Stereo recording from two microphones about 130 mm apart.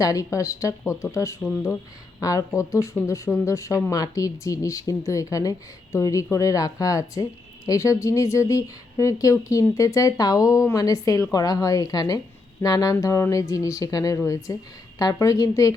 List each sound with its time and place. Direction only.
0.0 s a woman's voice: 25° left (ahead or behind)